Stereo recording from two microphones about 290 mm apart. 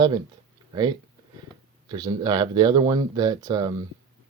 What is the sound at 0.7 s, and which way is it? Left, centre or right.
Speech, centre.